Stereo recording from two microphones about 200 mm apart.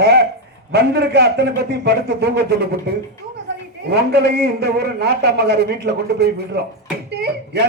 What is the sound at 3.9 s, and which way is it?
A man's voice, 55° right (ahead or behind).